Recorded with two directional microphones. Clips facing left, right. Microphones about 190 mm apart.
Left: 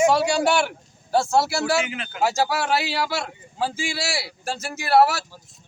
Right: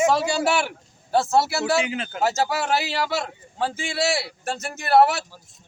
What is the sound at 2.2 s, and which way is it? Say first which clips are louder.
Speech: left 1 dB; centre (ahead or behind).